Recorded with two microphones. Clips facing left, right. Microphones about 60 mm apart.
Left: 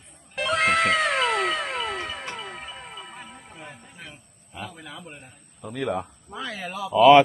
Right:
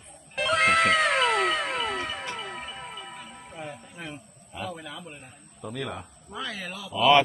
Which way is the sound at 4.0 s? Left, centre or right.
Centre.